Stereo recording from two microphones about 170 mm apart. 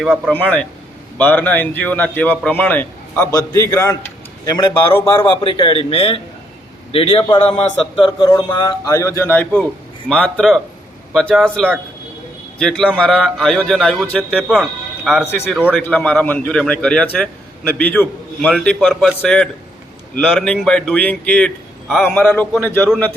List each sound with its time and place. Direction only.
0.0 s a man's voice: 5° right (ahead or behind)
0.3 s a man's voice: 10° left (ahead or behind)